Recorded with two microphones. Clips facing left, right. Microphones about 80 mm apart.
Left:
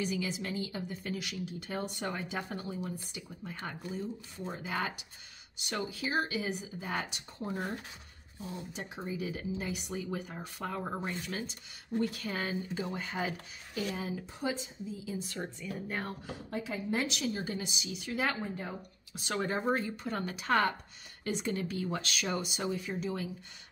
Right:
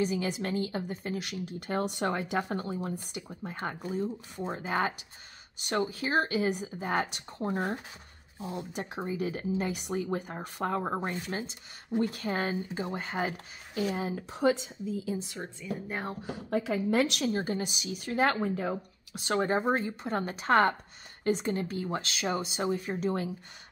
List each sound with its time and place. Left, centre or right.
0.0 s speech: right
2.5 s speech: right
8.4 s speech: right
8.7 s speech: right
14.3 s speech: right
15.3 s a woman's voice: centre
16.5 s a woman's voice: right
17.3 s speech: right
17.8 s speech: right
18.4 s a woman's voice: right
19.1 s speech: right
19.4 s speech: right
21.5 s speech: right
22.5 s speech: right